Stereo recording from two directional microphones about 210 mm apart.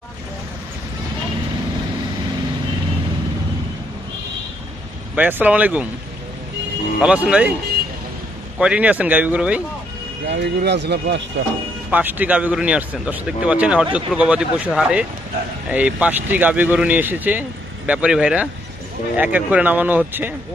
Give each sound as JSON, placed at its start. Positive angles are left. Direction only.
{"t": 5.1, "sound": "speech", "side_deg": -5}
{"t": 7.0, "sound": "speech", "side_deg": -5}
{"t": 8.5, "sound": "speech", "side_deg": -5}
{"t": 10.2, "sound": "speech", "side_deg": -55}
{"t": 11.9, "sound": "speech", "side_deg": -10}